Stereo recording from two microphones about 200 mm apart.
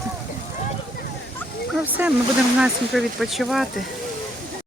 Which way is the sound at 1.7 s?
5° right (ahead or behind).